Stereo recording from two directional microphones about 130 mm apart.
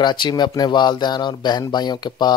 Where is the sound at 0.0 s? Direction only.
35° left (ahead or behind).